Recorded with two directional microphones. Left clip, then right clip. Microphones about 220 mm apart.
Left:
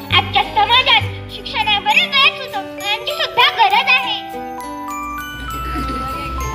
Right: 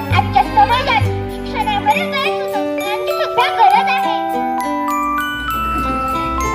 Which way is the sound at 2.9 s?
40° right (ahead or behind).